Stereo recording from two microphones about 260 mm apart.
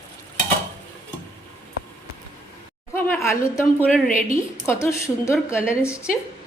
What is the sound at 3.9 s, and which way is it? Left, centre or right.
Speech, centre.